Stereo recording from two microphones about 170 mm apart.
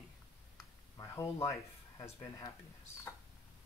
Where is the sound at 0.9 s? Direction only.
15° left (ahead or behind).